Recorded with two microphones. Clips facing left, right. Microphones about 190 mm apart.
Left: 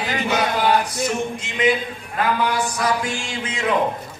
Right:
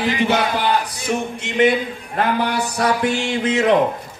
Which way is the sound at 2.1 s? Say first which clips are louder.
Right 1 dB; 60° right (ahead or behind).